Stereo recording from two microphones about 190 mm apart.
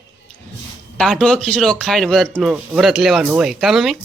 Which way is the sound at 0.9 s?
5° left (ahead or behind).